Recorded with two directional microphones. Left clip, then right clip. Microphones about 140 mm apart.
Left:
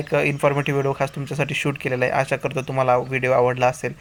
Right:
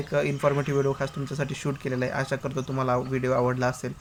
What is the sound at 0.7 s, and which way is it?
Speech, 35° left (ahead or behind).